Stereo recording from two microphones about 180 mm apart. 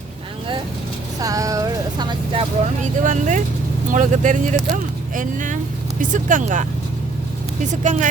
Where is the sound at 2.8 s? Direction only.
45° right (ahead or behind).